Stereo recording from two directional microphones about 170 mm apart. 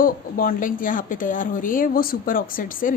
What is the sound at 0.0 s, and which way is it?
Speech, 55° left (ahead or behind).